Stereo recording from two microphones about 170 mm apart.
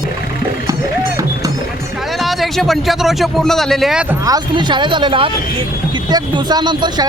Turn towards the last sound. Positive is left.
turn(degrees=-25)  # may be behind; listen again after turning